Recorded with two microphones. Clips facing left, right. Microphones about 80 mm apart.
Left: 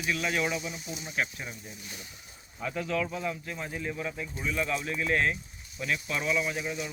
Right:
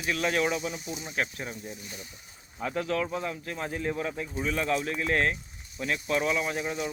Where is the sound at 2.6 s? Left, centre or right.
Right.